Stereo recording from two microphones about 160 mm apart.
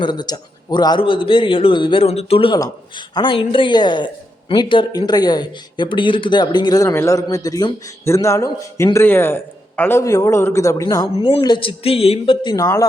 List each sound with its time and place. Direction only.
0.0 s a man's voice: 25° left (ahead or behind)